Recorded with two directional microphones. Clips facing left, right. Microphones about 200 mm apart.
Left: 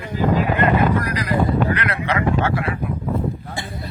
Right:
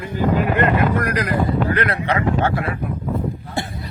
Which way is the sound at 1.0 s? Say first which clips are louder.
Right 4 dB; 50° right (ahead or behind).